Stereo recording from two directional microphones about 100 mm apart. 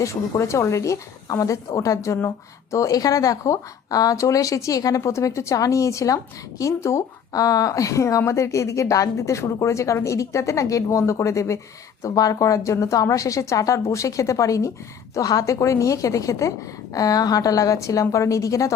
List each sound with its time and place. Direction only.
0.0 s speech: 30° left (ahead or behind)